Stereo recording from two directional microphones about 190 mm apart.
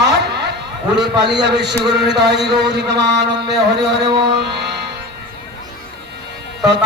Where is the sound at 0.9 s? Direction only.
65° right (ahead or behind).